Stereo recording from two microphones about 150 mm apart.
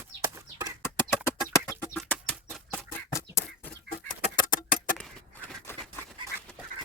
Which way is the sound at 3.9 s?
65° left (ahead or behind).